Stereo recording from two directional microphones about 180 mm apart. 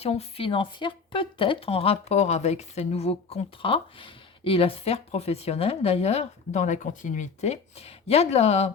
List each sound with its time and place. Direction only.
0.0 s speech: 35° left (ahead or behind)